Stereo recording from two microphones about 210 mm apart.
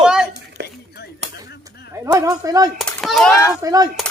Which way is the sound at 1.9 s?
15° right (ahead or behind).